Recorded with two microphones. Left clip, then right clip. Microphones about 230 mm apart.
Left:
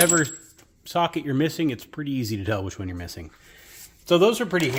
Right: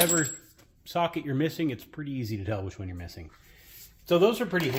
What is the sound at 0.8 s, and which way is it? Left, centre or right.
Speech, left.